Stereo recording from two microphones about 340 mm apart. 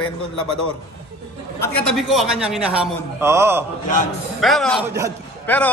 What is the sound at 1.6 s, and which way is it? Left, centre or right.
A man's voice, centre.